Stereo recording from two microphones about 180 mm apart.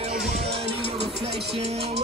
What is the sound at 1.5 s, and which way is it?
Music, 35° right (ahead or behind).